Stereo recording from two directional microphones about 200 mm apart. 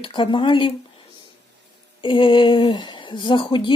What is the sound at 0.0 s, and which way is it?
Speech, 25° left (ahead or behind).